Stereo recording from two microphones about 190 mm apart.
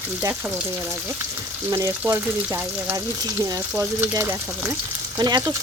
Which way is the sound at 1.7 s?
15° right (ahead or behind).